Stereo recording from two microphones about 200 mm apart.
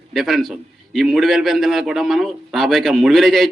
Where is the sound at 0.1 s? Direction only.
Centre (ahead or behind).